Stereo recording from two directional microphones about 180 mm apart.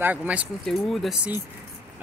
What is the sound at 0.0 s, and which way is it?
Speech, 10° right (ahead or behind).